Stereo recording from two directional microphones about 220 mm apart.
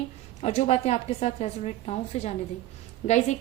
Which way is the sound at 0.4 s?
30° left (ahead or behind).